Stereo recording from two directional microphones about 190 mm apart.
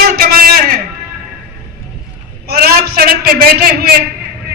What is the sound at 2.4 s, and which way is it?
A man's voice, 55° right (ahead or behind).